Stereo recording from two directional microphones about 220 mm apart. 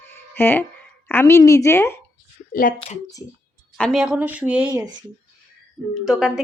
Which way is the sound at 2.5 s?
40° left (ahead or behind).